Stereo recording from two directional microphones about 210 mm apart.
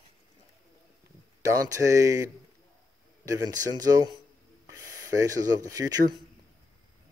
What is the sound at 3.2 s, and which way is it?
Speech, 15° right (ahead or behind).